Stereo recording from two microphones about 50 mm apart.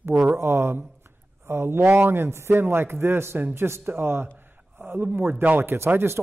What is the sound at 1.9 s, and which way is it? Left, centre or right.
Speech, right.